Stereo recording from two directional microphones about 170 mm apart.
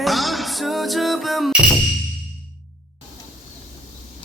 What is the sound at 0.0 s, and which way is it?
Music, centre (ahead or behind).